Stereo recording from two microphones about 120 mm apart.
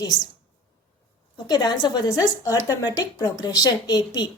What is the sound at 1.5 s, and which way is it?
Speech, 35° left (ahead or behind).